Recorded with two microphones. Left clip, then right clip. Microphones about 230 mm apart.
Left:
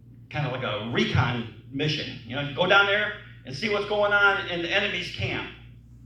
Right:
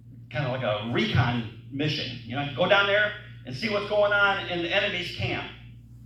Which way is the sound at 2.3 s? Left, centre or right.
Left.